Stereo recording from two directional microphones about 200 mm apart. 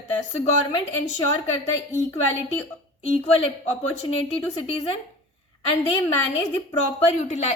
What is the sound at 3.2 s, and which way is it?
Speech, 30° left (ahead or behind).